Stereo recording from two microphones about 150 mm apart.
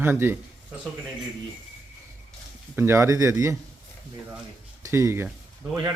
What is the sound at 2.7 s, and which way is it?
Speech, 15° right (ahead or behind).